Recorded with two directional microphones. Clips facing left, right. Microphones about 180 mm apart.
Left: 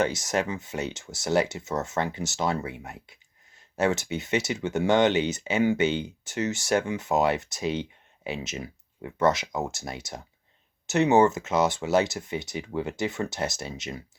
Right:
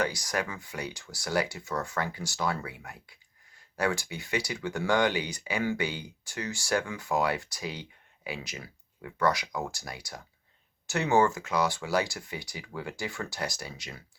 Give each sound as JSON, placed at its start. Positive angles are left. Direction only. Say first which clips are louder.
{"t": 0.0, "sound": "speech", "louder": "left 5 dB", "side_deg": 25}